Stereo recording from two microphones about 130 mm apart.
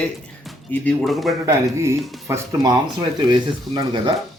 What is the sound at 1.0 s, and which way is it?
Speech, centre (ahead or behind).